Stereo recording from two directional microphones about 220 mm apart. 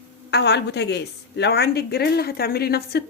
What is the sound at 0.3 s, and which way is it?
A woman's voice, 50° left (ahead or behind).